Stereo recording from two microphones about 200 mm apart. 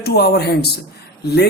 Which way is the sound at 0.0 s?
55° left (ahead or behind).